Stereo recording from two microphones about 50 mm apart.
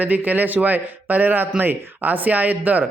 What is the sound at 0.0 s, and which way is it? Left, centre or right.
Speech, right.